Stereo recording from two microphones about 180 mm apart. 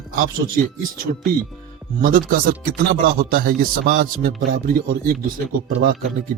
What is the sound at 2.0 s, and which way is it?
Speech, 50° right (ahead or behind).